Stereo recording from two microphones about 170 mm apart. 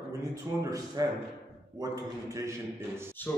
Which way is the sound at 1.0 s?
20° right (ahead or behind).